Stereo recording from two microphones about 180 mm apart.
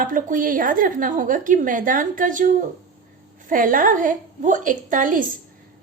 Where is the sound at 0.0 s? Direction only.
50° right (ahead or behind).